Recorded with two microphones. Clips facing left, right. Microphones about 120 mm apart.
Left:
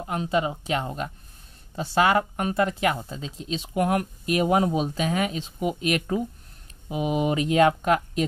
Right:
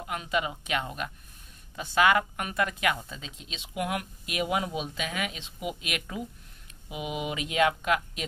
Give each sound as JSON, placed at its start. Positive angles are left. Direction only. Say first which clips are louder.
{"t": 0.0, "sound": "speech", "louder": "left 5 dB", "side_deg": 30}